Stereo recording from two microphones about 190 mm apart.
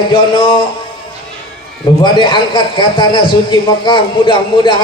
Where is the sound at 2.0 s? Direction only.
25° left (ahead or behind).